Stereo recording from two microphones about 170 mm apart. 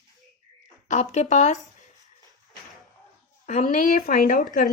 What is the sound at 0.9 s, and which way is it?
Speech, 45° left (ahead or behind).